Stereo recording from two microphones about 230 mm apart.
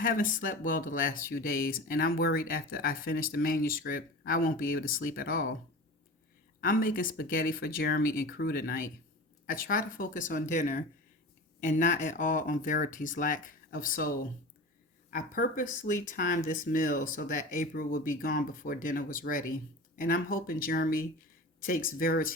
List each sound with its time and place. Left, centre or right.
0.0 s speech: left
6.6 s speech: left